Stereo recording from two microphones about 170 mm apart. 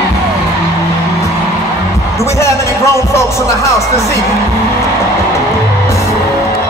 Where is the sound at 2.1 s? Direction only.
15° left (ahead or behind).